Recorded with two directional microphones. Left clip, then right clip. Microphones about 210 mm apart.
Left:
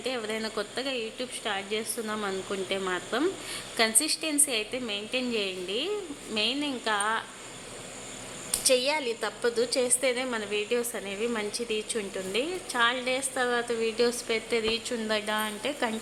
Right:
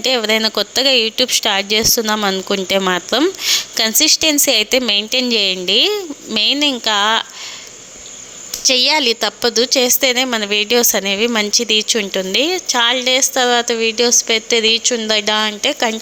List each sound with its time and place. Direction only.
0.0 s speech: 45° right (ahead or behind)
8.6 s a woman's voice: 40° right (ahead or behind)